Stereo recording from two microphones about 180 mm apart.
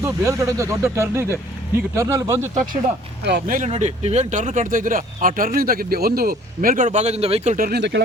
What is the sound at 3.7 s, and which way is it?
Speech, 35° right (ahead or behind).